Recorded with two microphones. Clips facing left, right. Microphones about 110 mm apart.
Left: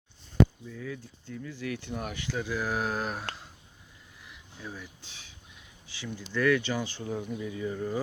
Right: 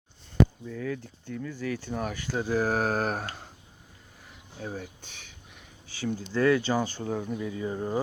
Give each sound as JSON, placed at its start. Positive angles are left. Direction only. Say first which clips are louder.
{"t": 0.6, "sound": "speech", "louder": "right 6 dB", "side_deg": -55}
{"t": 4.2, "sound": "a sound", "louder": "right 5 dB", "side_deg": -45}
{"t": 5.9, "sound": "speech", "louder": "right 5 dB", "side_deg": -40}
{"t": 7.0, "sound": "speech", "louder": "right 3 dB", "side_deg": -60}
{"t": 7.5, "sound": "speech", "louder": "right 2 dB", "side_deg": -35}